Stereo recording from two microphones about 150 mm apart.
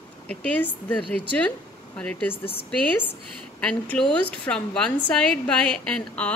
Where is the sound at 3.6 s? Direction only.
5° left (ahead or behind).